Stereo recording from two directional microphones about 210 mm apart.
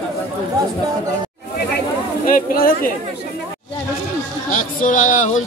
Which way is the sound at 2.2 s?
40° left (ahead or behind).